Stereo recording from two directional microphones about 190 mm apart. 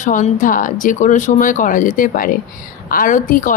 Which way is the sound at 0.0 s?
40° left (ahead or behind).